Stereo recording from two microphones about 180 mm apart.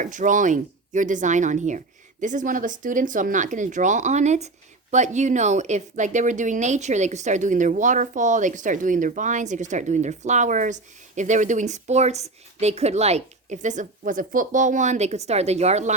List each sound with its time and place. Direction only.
0.0 s speech: 45° right (ahead or behind)